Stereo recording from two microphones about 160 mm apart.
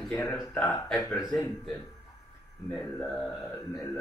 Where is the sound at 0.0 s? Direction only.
20° left (ahead or behind).